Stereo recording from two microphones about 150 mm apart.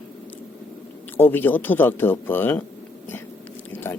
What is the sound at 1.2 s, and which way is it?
Speech, 15° left (ahead or behind).